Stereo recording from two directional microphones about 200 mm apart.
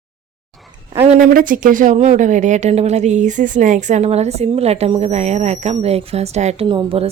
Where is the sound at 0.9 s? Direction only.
30° right (ahead or behind).